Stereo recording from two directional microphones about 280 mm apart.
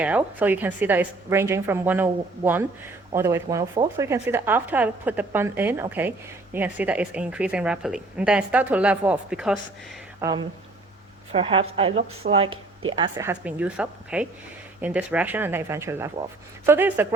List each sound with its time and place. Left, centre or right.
0.0 s a woman's voice: centre
10.2 s a woman's voice: centre